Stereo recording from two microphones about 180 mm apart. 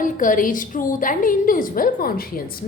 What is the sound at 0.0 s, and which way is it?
A woman's voice, 50° left (ahead or behind).